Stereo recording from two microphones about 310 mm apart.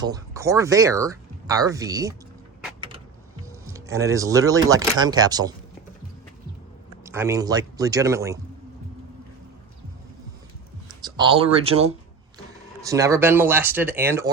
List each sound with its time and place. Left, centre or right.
0.0 s speech: centre
3.7 s speech: centre
7.0 s speech: centre
11.0 s speech: centre